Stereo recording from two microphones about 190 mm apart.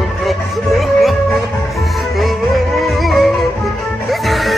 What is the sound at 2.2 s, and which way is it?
Music, centre (ahead or behind).